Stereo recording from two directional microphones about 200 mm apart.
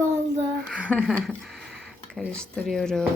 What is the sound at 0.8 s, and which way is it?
Speech, 5° left (ahead or behind).